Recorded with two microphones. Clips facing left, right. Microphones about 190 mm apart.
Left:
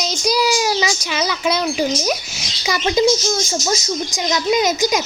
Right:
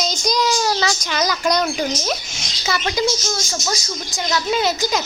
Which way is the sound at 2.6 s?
20° left (ahead or behind).